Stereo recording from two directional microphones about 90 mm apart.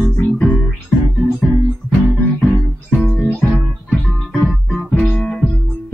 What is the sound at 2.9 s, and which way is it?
Music, centre (ahead or behind).